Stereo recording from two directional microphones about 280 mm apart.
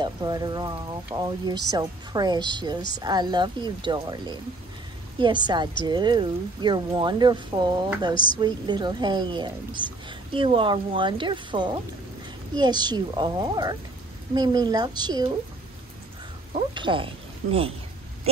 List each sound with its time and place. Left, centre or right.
0.0 s speech: centre
8.1 s speech: centre
8.4 s speech: centre
16.5 s speech: centre